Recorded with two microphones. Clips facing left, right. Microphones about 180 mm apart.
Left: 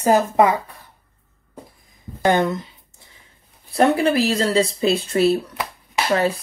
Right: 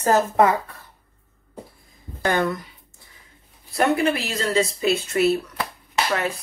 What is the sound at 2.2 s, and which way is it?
Speech, 20° left (ahead or behind).